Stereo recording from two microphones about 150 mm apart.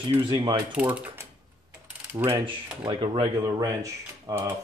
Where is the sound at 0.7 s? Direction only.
10° right (ahead or behind).